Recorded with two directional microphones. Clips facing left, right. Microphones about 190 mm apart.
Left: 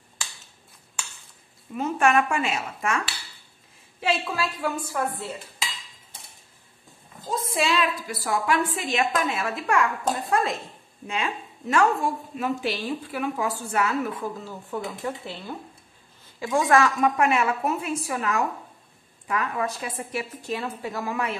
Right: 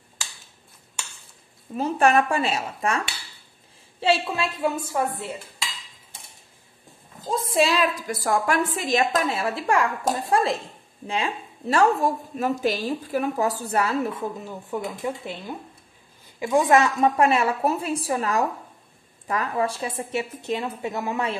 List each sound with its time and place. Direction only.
1.7 s speech: 35° right (ahead or behind)
4.0 s a woman's voice: 25° right (ahead or behind)
7.5 s a woman's voice: 40° right (ahead or behind)